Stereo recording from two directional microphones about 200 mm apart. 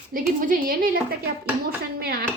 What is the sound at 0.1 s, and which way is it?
A woman's voice, 45° right (ahead or behind).